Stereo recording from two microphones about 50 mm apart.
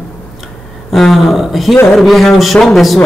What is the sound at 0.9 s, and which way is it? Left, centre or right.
A man's voice, centre.